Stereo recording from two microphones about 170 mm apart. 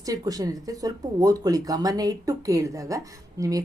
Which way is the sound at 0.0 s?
20° right (ahead or behind).